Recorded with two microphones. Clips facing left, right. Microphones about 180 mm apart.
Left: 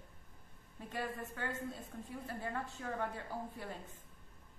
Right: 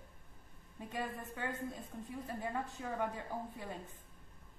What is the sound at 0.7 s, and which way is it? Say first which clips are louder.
A woman's voice: even; 15° right (ahead or behind).